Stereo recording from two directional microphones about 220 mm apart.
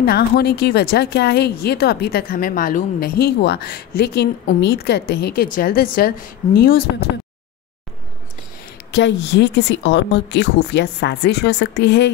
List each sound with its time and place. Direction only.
0.0 s speech: 45° left (ahead or behind)
8.9 s speech: 55° left (ahead or behind)